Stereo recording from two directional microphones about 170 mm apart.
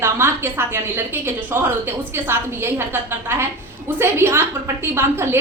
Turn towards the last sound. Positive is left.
turn(degrees=-15)  # may be behind; listen again after turning